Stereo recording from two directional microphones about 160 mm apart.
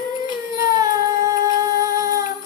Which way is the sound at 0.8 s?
20° right (ahead or behind).